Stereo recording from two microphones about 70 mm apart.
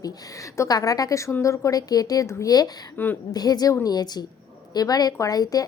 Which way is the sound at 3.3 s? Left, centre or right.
Left.